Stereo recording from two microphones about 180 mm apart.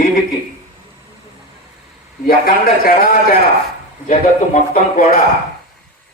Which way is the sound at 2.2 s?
55° left (ahead or behind).